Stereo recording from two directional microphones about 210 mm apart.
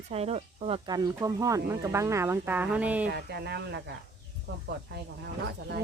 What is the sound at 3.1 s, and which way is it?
Speech, 50° right (ahead or behind).